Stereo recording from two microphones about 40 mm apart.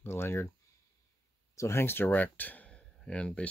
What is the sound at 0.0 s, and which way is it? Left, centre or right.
Speech, left.